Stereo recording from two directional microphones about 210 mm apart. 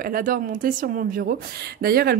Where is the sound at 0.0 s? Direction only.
45° right (ahead or behind).